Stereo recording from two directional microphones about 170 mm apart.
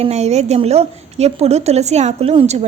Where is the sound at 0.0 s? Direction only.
40° right (ahead or behind).